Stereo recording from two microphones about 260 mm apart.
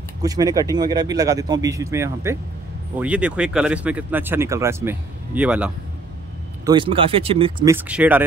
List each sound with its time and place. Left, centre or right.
0.2 s speech: centre
6.6 s speech: centre
7.7 s speech: centre